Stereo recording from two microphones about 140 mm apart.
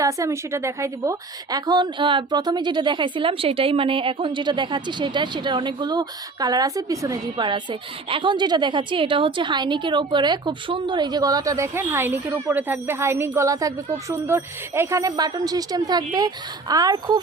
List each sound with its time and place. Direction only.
0.0 s a woman's voice: 20° right (ahead or behind)